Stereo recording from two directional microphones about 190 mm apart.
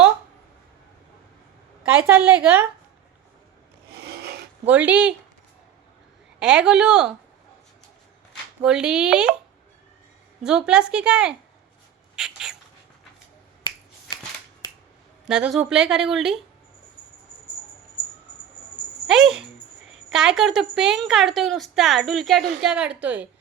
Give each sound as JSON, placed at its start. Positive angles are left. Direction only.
{"t": 1.8, "sound": "a woman's voice", "side_deg": -5}
{"t": 4.0, "sound": "filing", "side_deg": -55}
{"t": 4.7, "sound": "a woman's voice", "side_deg": -5}
{"t": 6.4, "sound": "a woman's voice", "side_deg": -5}
{"t": 8.6, "sound": "a woman's voice", "side_deg": -5}
{"t": 10.4, "sound": "a woman's voice", "side_deg": -5}
{"t": 12.1, "sound": "a sound", "side_deg": -5}
{"t": 15.3, "sound": "a woman's voice", "side_deg": -5}
{"t": 19.0, "sound": "a woman's voice", "side_deg": -5}